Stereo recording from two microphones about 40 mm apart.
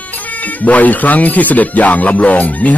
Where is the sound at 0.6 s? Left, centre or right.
Left.